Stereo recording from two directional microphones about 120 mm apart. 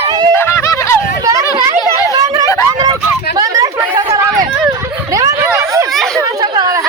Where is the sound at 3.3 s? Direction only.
30° right (ahead or behind).